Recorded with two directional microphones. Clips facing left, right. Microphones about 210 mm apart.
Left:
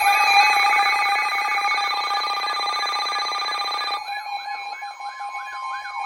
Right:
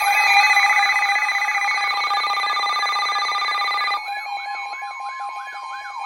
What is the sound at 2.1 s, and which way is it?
Telephone, 20° left (ahead or behind).